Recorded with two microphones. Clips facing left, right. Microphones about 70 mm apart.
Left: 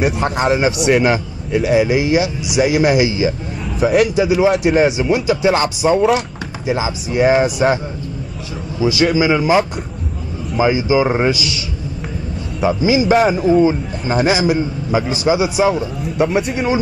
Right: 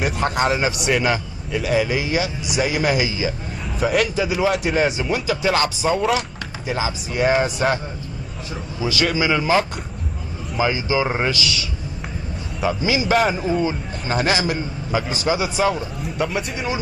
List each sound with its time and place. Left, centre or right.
0.0 s a man's voice: centre
8.8 s a man's voice: centre
12.5 s a man's voice: centre